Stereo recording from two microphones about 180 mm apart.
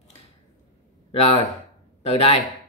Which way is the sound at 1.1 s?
30° left (ahead or behind).